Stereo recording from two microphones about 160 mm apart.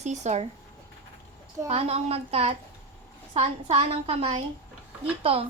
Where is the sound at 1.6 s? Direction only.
40° right (ahead or behind).